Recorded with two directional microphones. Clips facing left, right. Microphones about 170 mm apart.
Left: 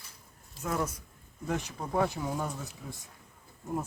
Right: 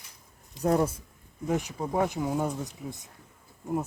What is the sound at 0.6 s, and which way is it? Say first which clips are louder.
Speech: right 8 dB; 35° right (ahead or behind).